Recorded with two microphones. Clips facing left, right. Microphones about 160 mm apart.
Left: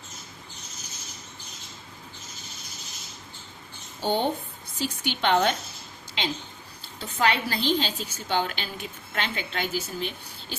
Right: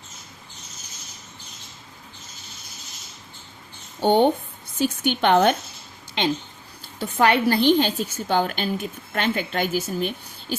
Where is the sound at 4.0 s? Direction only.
60° right (ahead or behind).